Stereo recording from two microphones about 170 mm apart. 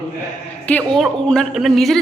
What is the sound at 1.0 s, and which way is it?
A man's voice, centre (ahead or behind).